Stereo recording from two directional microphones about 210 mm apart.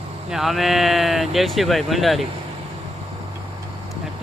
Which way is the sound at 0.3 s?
Centre (ahead or behind).